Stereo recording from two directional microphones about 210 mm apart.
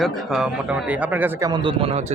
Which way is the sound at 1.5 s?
25° right (ahead or behind).